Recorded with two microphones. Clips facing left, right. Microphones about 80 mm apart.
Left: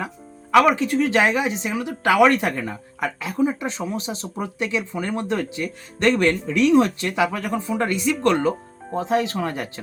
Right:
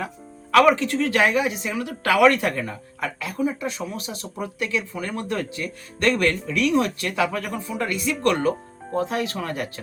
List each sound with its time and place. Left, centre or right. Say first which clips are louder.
0.5 s speech: left 1 dB; centre